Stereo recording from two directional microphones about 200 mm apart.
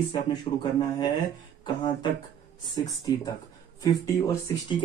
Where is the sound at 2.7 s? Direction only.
20° left (ahead or behind).